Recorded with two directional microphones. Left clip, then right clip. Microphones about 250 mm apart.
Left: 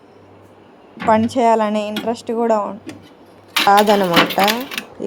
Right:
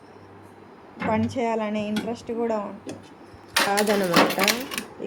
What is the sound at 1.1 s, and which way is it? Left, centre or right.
Speech, left.